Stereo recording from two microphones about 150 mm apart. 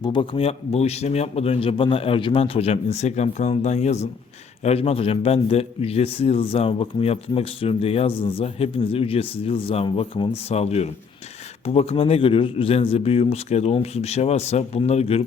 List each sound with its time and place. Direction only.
0.0 s a man's voice: 35° left (ahead or behind)